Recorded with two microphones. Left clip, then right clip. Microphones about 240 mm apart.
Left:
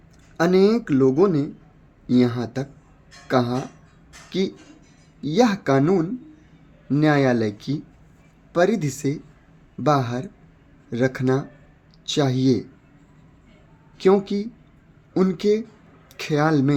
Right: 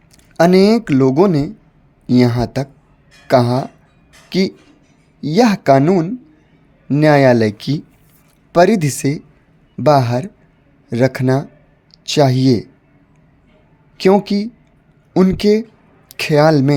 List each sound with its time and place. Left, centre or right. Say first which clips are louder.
0.3 s speech: right 7 dB; right
14.0 s speech: right 5 dB; right